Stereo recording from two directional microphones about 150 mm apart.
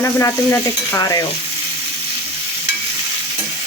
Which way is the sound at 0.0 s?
20° left (ahead or behind).